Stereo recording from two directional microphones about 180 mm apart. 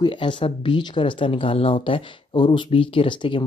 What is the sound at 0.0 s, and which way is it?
Speech, 25° left (ahead or behind).